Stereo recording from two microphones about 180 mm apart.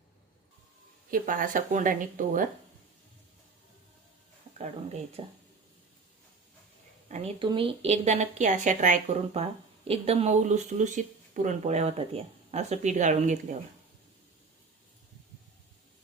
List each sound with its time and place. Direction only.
1.1 s speech: 50° right (ahead or behind)
4.5 s a woman's voice: 40° right (ahead or behind)
7.1 s a woman's voice: 30° right (ahead or behind)